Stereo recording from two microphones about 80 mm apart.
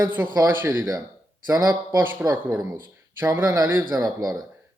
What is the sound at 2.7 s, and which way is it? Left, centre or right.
Speech, right.